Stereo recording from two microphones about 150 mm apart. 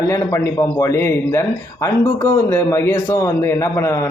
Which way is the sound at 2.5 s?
20° left (ahead or behind).